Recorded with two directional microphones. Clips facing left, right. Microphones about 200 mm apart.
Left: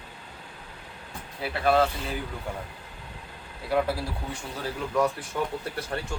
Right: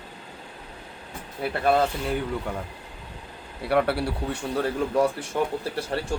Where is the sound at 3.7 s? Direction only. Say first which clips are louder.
Right 3 dB; 70° right (ahead or behind).